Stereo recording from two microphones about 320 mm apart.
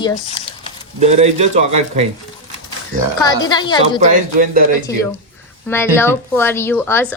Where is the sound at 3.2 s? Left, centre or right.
Centre.